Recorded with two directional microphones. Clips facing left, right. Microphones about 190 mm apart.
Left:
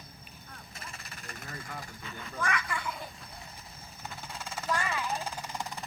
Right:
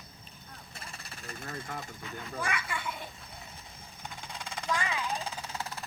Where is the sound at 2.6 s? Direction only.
Centre (ahead or behind).